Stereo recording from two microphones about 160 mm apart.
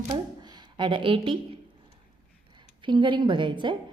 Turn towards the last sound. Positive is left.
turn(degrees=-30)  # may be behind; listen again after turning